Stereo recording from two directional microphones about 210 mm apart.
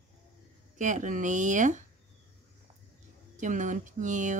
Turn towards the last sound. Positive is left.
turn(degrees=-35)  # may be behind; listen again after turning